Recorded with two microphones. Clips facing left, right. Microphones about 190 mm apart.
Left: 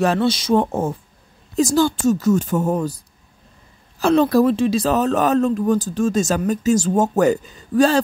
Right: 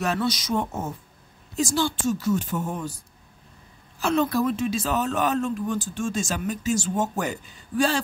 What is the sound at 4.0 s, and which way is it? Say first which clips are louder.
Speech: left 8 dB; 35° left (ahead or behind).